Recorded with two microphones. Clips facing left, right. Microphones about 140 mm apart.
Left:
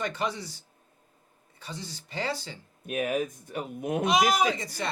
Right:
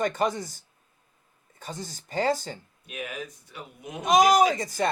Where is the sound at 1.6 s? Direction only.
45° right (ahead or behind).